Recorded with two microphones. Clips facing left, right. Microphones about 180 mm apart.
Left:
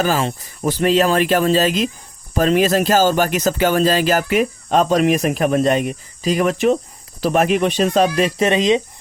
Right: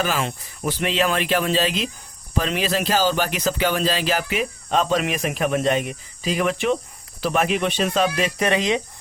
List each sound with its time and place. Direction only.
0.0 s speech: 40° left (ahead or behind)
8.4 s speech: 20° left (ahead or behind)